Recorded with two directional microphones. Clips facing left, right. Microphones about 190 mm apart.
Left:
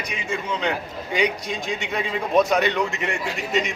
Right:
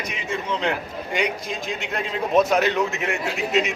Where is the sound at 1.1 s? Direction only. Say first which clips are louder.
Left 2 dB; centre (ahead or behind).